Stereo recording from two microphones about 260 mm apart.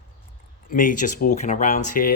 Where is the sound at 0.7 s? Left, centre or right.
Left.